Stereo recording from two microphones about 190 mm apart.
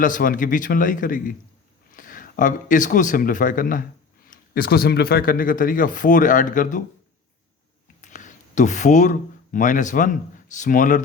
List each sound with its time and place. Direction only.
0.0 s speech: 45° left (ahead or behind)
8.0 s speech: 40° left (ahead or behind)